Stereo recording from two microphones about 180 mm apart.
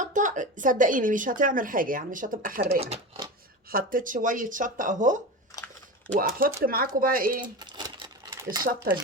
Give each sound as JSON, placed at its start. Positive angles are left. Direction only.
{"t": 0.0, "sound": "speech", "side_deg": -45}
{"t": 2.8, "sound": "speech", "side_deg": -35}
{"t": 3.7, "sound": "speech", "side_deg": -50}
{"t": 7.4, "sound": "a sound", "side_deg": -25}
{"t": 8.6, "sound": "speech", "side_deg": -55}